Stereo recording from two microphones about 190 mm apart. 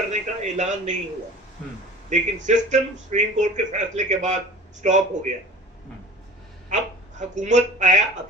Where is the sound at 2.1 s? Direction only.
40° right (ahead or behind).